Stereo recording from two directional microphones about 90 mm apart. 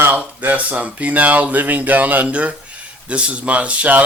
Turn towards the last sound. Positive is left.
turn(degrees=-15)  # may be behind; listen again after turning